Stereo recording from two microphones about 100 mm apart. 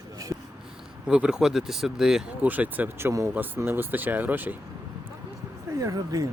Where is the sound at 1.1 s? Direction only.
10° right (ahead or behind).